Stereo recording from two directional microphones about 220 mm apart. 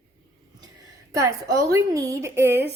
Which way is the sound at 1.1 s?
15° right (ahead or behind).